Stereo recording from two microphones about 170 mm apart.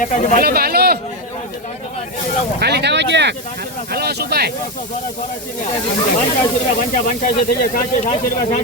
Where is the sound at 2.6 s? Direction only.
75° right (ahead or behind); by 3.3 s 90° right.